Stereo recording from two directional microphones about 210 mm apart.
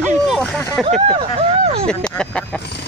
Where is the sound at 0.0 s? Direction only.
Centre (ahead or behind).